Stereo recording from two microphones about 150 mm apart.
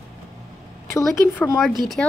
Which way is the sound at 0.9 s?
20° left (ahead or behind).